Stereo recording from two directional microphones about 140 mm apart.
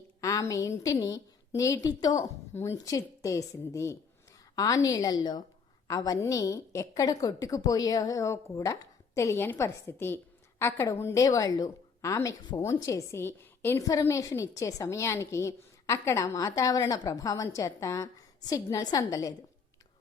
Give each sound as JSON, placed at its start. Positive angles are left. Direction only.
{"t": 0.2, "sound": "a woman's voice", "side_deg": 20}